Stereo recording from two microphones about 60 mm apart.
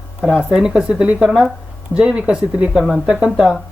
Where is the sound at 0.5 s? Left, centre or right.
Centre.